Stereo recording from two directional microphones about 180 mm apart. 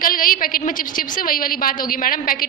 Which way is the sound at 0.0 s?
50° left (ahead or behind).